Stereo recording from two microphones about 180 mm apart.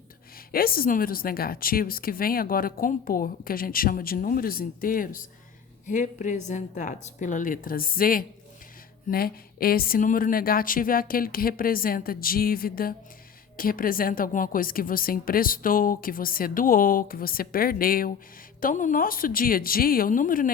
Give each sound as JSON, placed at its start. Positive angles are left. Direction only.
{"t": 0.5, "sound": "speech", "side_deg": 55}